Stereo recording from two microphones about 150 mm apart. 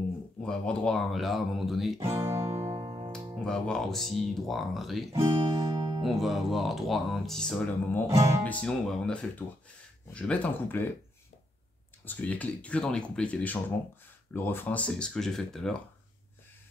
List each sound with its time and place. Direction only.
0.4 s speech: 5° left (ahead or behind)
2.2 s music: 35° right (ahead or behind)
3.4 s speech: 5° left (ahead or behind)
5.4 s music: 30° right (ahead or behind)
6.0 s speech: centre (ahead or behind)
8.1 s music: 20° right (ahead or behind)
8.5 s speech: 5° left (ahead or behind)
12.0 s speech: 10° left (ahead or behind)